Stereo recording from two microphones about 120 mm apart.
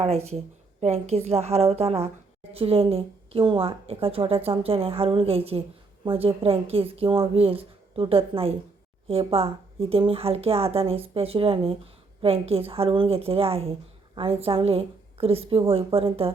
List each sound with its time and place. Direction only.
0.0 s a woman's voice: 60° right (ahead or behind)